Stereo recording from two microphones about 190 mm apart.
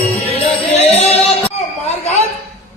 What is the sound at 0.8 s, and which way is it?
Music, 35° left (ahead or behind).